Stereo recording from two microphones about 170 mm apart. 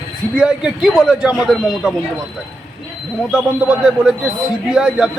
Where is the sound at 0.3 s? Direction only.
5° right (ahead or behind).